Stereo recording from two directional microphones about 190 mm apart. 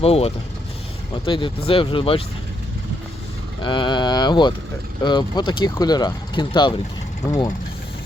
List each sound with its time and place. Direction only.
0.0 s speech: 30° left (ahead or behind)
3.6 s speech: 25° left (ahead or behind)